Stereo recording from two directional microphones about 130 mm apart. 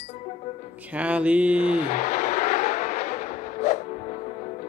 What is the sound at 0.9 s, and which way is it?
Music, 10° right (ahead or behind).